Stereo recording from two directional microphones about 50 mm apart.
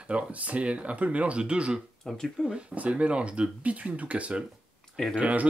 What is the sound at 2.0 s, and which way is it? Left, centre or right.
Speech, centre.